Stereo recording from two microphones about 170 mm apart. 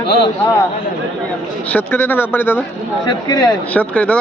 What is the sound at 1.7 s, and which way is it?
Speech, 10° left (ahead or behind).